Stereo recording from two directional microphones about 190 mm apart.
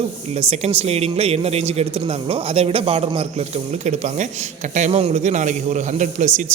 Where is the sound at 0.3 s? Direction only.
35° right (ahead or behind).